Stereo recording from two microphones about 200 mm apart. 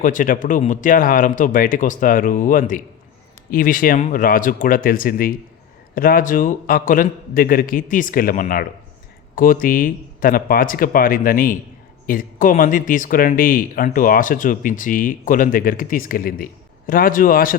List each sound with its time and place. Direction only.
0.0 s speech: 40° left (ahead or behind)